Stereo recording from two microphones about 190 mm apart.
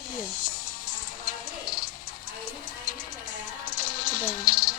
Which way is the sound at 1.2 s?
45° left (ahead or behind).